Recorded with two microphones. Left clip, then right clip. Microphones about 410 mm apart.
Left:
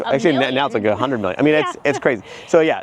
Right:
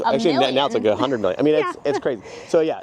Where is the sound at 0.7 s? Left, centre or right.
Left.